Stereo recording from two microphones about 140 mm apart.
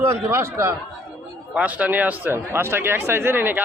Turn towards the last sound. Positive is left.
turn(degrees=-15)  # may be behind; listen again after turning